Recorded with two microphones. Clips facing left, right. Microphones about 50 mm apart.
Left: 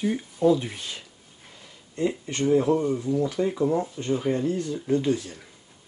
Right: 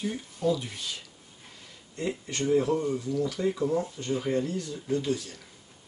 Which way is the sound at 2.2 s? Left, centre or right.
Left.